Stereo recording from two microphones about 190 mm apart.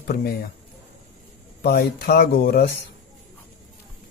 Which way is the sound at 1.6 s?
55° left (ahead or behind).